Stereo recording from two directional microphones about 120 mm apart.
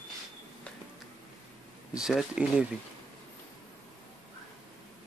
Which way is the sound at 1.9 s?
5° right (ahead or behind).